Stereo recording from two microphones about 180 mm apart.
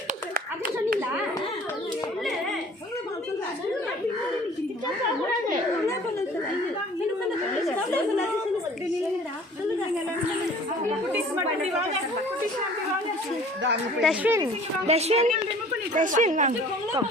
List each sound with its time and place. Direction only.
14.0 s speech: 5° right (ahead or behind)
14.8 s a woman's voice: 35° right (ahead or behind)